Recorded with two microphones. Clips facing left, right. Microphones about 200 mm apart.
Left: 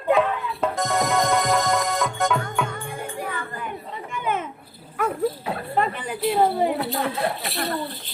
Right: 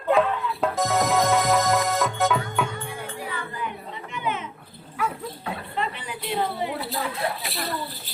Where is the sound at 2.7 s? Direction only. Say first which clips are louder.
Left 2 dB; 50° left (ahead or behind).